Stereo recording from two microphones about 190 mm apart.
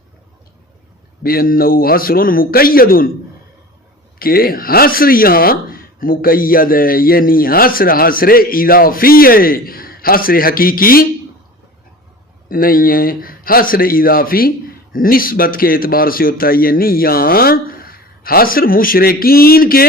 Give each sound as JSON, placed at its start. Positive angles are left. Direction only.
{"t": 1.2, "sound": "speech", "side_deg": 50}
{"t": 4.2, "sound": "speech", "side_deg": 50}
{"t": 12.5, "sound": "speech", "side_deg": 50}